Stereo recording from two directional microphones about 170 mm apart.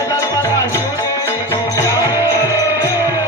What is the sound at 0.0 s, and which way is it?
Music, 20° left (ahead or behind).